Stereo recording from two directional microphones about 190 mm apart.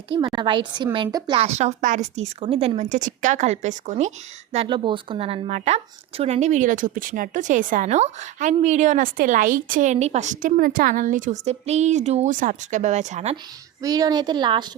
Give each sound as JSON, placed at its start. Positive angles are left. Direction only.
{"t": 0.1, "sound": "speech", "side_deg": -25}
{"t": 1.5, "sound": "a woman's voice", "side_deg": -35}
{"t": 13.8, "sound": "speech", "side_deg": -20}